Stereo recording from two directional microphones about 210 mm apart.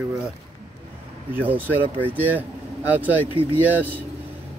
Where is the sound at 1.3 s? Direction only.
10° right (ahead or behind).